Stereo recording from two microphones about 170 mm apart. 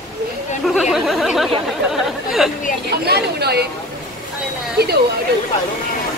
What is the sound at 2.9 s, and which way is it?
Speech, 70° right (ahead or behind).